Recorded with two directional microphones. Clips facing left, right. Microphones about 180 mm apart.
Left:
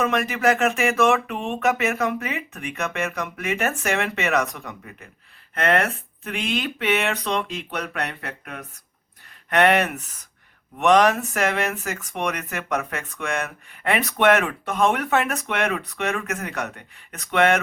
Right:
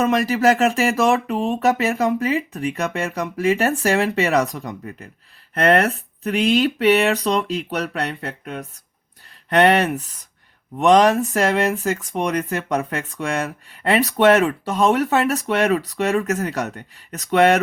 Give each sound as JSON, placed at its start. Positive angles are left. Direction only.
{"t": 0.0, "sound": "speech", "side_deg": -35}